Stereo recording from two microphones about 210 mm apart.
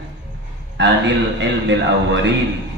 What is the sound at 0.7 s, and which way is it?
A man's voice, 55° right (ahead or behind).